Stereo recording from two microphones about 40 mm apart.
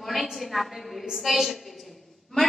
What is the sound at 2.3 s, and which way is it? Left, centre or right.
Speech, centre.